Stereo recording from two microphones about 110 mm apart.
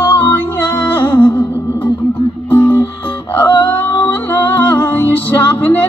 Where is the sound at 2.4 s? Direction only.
20° left (ahead or behind).